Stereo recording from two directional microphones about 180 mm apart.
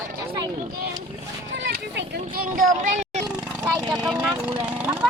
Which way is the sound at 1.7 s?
55° right (ahead or behind).